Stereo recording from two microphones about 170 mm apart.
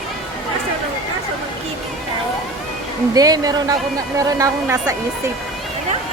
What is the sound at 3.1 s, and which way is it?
Speech, 20° right (ahead or behind).